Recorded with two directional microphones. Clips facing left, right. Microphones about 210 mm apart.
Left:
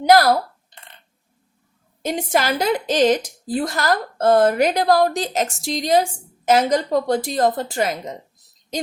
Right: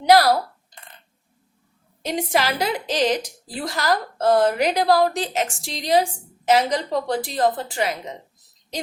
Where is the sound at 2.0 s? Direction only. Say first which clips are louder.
Left 2 dB; 45° left (ahead or behind).